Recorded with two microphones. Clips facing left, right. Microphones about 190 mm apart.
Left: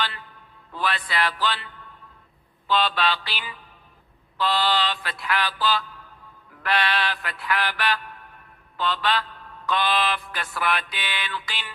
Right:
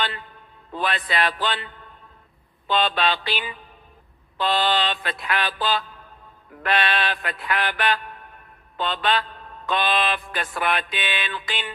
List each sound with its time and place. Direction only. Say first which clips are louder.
0.0 s a man's voice: right 2 dB; 20° right (ahead or behind)
0.7 s mantra: right 2 dB; 20° right (ahead or behind)